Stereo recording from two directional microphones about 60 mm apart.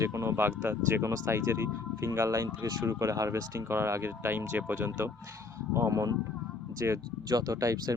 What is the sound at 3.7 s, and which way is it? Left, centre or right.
Speech, right.